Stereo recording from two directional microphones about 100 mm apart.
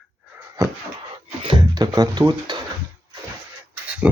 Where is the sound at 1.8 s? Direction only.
40° right (ahead or behind).